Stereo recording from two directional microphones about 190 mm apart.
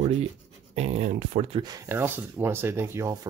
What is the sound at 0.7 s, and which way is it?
Speech, 35° right (ahead or behind).